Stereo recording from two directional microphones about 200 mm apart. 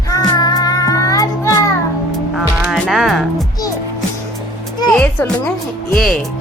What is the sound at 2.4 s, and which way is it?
Music, 5° right (ahead or behind).